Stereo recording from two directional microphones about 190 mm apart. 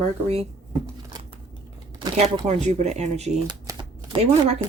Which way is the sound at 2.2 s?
35° right (ahead or behind).